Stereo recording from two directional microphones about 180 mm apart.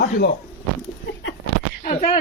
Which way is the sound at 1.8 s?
45° left (ahead or behind).